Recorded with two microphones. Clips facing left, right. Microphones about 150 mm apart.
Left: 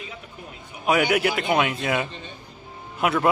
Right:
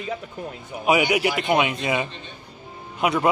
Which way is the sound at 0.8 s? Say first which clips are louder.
Right 1 dB; 5° right (ahead or behind).